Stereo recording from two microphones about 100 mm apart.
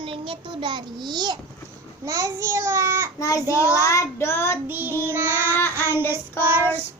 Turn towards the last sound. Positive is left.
turn(degrees=-20)  # may be behind; listen again after turning